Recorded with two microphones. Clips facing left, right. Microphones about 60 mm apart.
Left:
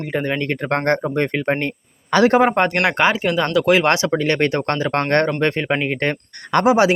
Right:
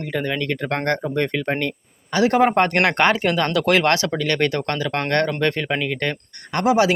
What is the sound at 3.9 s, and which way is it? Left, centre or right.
Speech, left.